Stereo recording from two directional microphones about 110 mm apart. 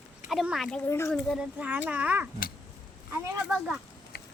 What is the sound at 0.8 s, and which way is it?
Speech, 20° left (ahead or behind).